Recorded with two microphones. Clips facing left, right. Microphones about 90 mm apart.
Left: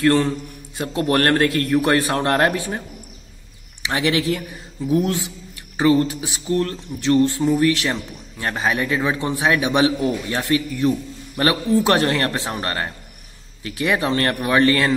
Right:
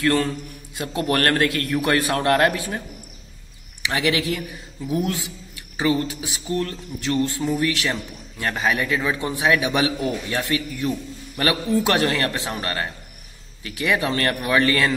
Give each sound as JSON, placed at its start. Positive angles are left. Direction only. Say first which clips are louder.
{"t": 0.0, "sound": "a man's voice", "louder": "left 4 dB", "side_deg": 30}
{"t": 3.8, "sound": "a man's voice", "louder": "left 2 dB", "side_deg": 35}